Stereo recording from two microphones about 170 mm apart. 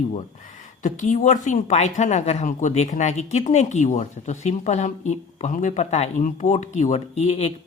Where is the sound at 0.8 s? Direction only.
45° left (ahead or behind).